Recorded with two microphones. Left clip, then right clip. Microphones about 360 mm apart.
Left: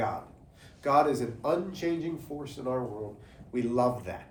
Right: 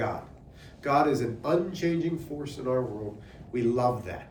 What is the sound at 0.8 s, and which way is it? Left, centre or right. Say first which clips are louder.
Speech: even; centre.